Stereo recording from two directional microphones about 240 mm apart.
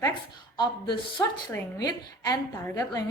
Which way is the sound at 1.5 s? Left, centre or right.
Centre.